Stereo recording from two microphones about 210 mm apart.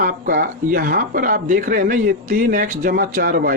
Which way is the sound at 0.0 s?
40° right (ahead or behind).